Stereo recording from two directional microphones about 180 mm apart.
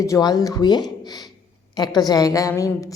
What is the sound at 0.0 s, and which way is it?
A woman's voice, 20° left (ahead or behind).